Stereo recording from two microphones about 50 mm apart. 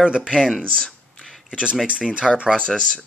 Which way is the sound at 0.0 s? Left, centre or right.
Centre.